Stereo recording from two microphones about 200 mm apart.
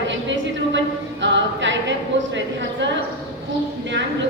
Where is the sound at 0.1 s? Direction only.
65° right (ahead or behind).